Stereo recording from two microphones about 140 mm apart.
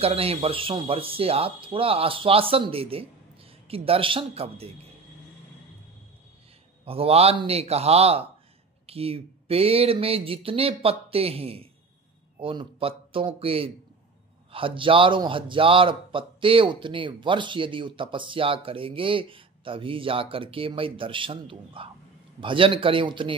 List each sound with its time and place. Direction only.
0.0 s speech: 45° right (ahead or behind)
6.8 s a man's voice: 45° right (ahead or behind)